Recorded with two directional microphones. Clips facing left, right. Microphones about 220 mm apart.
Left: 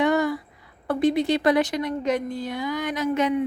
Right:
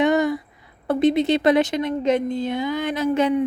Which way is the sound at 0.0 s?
20° right (ahead or behind).